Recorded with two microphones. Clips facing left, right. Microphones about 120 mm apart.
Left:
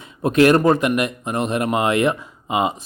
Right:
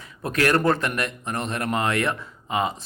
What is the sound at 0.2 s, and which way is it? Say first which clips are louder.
Speech: left 8 dB; 20° left (ahead or behind).